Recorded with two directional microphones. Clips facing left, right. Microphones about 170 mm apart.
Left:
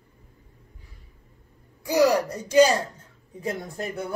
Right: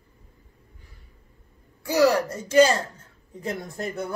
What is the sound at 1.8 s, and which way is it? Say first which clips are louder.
Speech: even; 15° left (ahead or behind).